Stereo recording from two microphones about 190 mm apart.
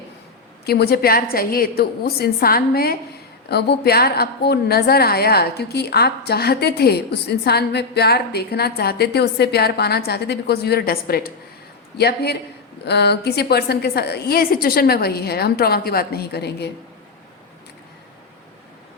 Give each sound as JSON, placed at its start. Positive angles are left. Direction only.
{"t": 0.6, "sound": "a woman's voice", "side_deg": 55}